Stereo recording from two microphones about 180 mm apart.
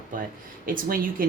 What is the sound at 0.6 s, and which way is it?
Speech, 50° right (ahead or behind).